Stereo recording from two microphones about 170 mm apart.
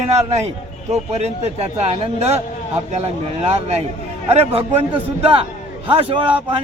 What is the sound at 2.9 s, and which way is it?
Speech, 40° right (ahead or behind).